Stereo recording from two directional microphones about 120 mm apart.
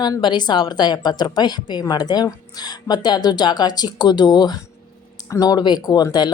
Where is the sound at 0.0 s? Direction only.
35° left (ahead or behind).